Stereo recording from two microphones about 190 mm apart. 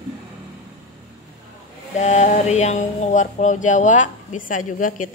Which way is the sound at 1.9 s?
40° left (ahead or behind).